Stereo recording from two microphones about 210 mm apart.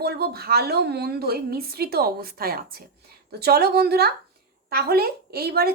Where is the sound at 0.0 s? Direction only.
50° right (ahead or behind).